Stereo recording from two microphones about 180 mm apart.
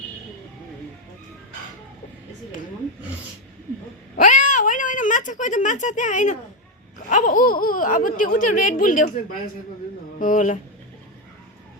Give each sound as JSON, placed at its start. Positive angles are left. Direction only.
{"t": 4.2, "sound": "a sound", "side_deg": 45}
{"t": 7.1, "sound": "speech", "side_deg": 50}
{"t": 10.2, "sound": "speech", "side_deg": 45}